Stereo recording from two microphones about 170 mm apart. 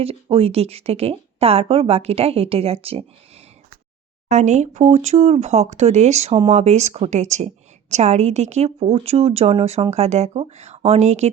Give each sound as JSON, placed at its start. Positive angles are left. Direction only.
{"t": 0.0, "sound": "speech", "side_deg": -35}
{"t": 4.3, "sound": "speech", "side_deg": -45}